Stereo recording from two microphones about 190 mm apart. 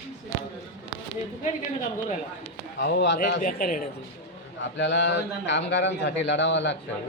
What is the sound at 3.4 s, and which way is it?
Speech, 45° left (ahead or behind).